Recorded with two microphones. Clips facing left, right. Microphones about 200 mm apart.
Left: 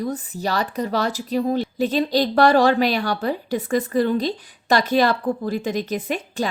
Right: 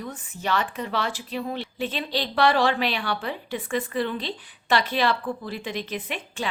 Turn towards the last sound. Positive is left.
turn(degrees=40)  # may be behind; listen again after turning